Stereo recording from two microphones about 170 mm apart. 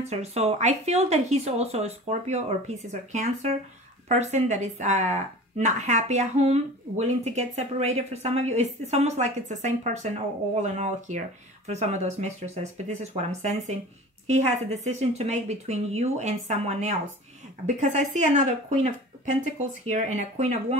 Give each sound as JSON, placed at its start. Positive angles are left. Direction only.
{"t": 0.0, "sound": "speech", "side_deg": -40}